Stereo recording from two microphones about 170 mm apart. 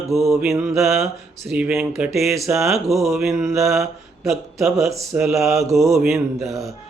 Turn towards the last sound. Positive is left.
turn(degrees=-20)  # may be behind; listen again after turning